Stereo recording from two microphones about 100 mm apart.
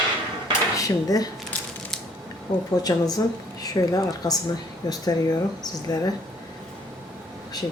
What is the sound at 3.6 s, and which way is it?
Speech, 35° left (ahead or behind).